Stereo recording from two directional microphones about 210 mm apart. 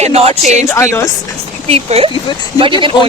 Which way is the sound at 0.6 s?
15° left (ahead or behind).